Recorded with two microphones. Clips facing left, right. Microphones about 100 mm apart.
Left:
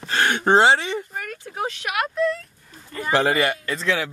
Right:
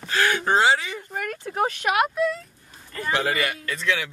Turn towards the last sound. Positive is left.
turn(degrees=35)  # may be behind; listen again after turning